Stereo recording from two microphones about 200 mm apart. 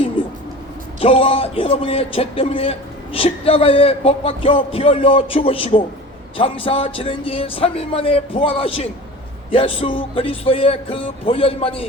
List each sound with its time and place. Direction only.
0.9 s a man's voice: 30° left (ahead or behind)